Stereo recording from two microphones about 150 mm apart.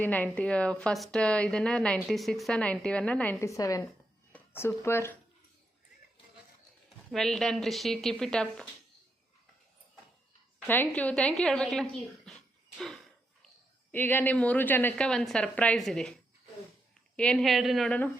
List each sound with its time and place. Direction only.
0.0 s a woman's voice: 10° left (ahead or behind)
7.1 s speech: centre (ahead or behind)
10.7 s speech: 10° left (ahead or behind)
13.9 s a woman's voice: 10° left (ahead or behind)
17.2 s speech: 5° left (ahead or behind)